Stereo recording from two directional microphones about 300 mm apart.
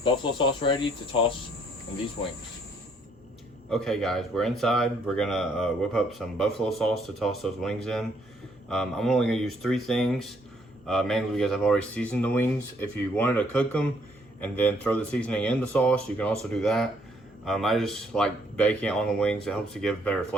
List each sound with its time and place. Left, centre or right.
0.0 s speech: centre
3.7 s speech: centre